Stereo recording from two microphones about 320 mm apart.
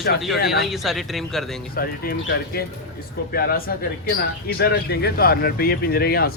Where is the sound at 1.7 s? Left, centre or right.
Left.